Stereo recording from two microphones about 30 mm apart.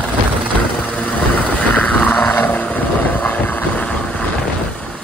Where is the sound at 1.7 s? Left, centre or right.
Left.